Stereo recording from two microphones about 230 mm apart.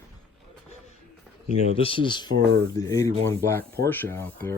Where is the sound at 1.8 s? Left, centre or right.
Left.